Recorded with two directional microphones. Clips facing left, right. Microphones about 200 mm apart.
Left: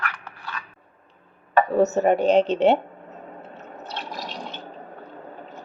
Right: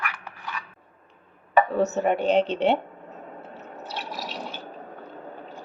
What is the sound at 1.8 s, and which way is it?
Speech, 45° left (ahead or behind).